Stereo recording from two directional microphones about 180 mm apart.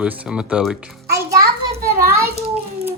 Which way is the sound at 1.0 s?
15° right (ahead or behind).